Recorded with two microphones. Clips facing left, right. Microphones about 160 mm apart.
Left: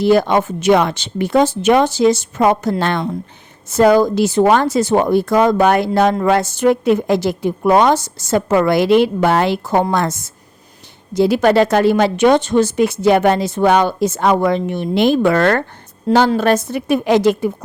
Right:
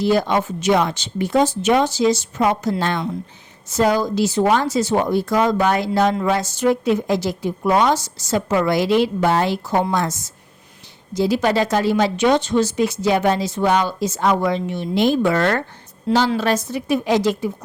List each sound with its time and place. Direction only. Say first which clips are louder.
0.0 s a woman's voice: left 5 dB; 60° left (ahead or behind)
9.6 s a woman's voice: left 4 dB; 55° left (ahead or behind)
16.0 s a woman's voice: left 5 dB; 50° left (ahead or behind)